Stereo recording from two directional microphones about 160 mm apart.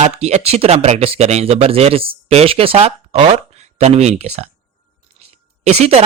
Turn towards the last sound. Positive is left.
turn(degrees=-40)  # may be behind; listen again after turning